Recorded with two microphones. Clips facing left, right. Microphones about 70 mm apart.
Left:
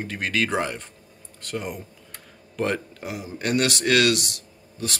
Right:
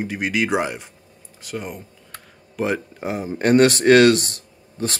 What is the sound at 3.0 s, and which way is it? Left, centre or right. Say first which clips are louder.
Speech: right 8 dB; right.